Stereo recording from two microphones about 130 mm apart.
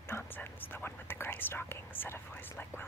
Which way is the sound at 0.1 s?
15° left (ahead or behind).